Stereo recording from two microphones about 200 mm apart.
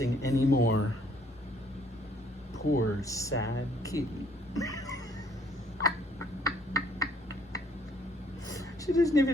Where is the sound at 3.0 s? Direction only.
15° left (ahead or behind).